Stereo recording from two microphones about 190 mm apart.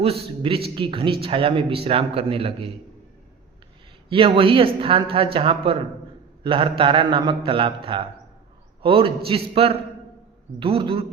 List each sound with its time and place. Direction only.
0.0 s speech: 30° right (ahead or behind)
4.1 s speech: 30° right (ahead or behind)